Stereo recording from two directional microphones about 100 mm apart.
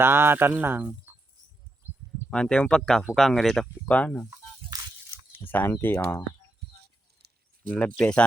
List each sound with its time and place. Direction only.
0.0 s speech: 20° right (ahead or behind)
2.3 s speech: 10° left (ahead or behind)
3.8 s speech: 15° left (ahead or behind)
5.4 s speech: 20° left (ahead or behind)
7.7 s speech: 10° left (ahead or behind)